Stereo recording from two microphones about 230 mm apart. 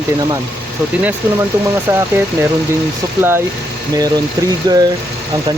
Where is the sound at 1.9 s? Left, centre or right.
Centre.